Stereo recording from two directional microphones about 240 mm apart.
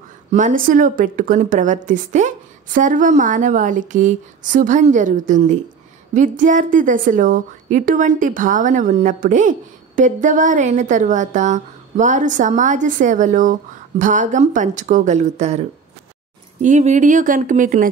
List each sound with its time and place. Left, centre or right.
0.3 s a woman's voice: right
16.6 s a woman's voice: right